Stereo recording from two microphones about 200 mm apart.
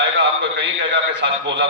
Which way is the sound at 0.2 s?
60° right (ahead or behind).